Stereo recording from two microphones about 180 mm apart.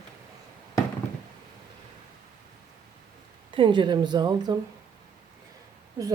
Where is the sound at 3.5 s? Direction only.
25° right (ahead or behind).